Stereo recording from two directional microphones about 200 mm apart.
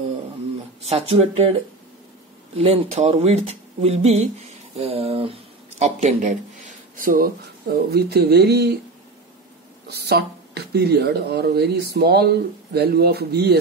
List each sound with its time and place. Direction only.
0.8 s speech: 30° right (ahead or behind)
2.5 s speech: 30° right (ahead or behind); by 8.7 s 55° right (ahead or behind)
9.8 s speech: 55° right (ahead or behind)